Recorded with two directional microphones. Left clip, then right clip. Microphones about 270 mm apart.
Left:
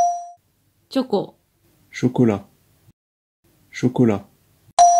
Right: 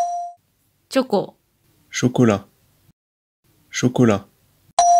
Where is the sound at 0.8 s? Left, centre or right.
Right.